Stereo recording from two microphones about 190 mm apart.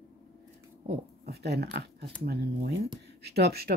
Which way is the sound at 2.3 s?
60° right (ahead or behind).